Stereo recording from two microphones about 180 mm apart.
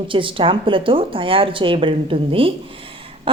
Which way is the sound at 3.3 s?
30° right (ahead or behind).